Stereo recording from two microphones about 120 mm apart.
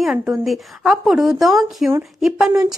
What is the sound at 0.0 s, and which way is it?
Speech, 5° right (ahead or behind).